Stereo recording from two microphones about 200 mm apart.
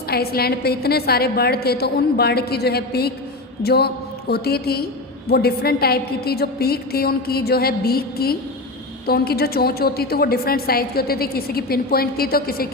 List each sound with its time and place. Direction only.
0.1 s a woman's voice: 50° left (ahead or behind)